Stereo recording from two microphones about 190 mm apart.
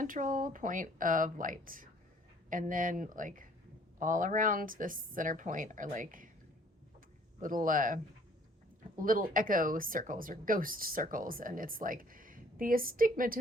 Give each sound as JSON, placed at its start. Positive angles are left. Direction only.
{"t": 0.0, "sound": "speech", "side_deg": -45}
{"t": 7.4, "sound": "speech", "side_deg": -45}